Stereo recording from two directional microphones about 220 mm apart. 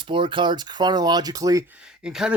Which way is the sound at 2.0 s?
5° right (ahead or behind).